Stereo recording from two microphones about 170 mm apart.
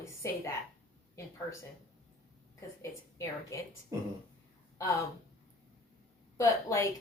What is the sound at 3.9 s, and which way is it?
Speech, 20° right (ahead or behind).